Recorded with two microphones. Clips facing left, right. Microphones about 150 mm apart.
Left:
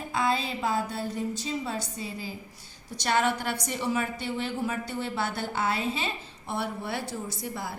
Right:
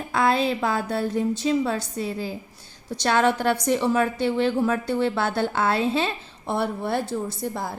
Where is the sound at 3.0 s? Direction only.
90° right.